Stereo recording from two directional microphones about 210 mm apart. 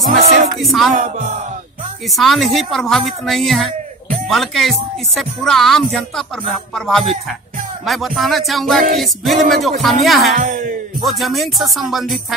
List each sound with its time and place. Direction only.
0.2 s music: 35° right (ahead or behind)
0.6 s a woman's voice: centre (ahead or behind)
0.9 s music: 35° right (ahead or behind)
2.0 s a woman's voice: centre (ahead or behind)
10.3 s music: 40° right (ahead or behind)
11.0 s a woman's voice: centre (ahead or behind)